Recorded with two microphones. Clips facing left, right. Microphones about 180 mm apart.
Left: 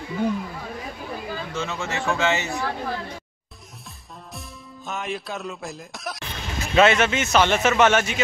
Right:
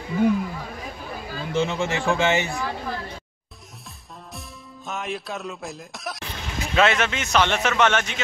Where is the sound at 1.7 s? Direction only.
15° right (ahead or behind).